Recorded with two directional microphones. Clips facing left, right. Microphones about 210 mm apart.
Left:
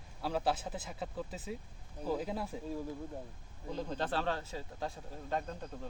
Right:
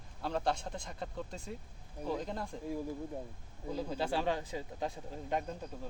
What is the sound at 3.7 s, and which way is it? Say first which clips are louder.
Speech: right 1 dB; 5° right (ahead or behind).